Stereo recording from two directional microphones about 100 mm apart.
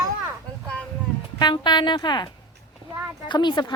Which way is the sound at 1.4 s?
50° left (ahead or behind).